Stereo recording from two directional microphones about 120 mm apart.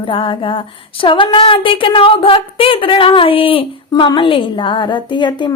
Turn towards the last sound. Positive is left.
turn(degrees=40)  # may be behind; listen again after turning